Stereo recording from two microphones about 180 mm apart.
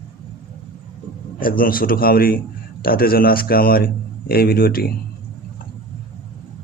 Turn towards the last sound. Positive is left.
turn(degrees=55)  # may be behind; listen again after turning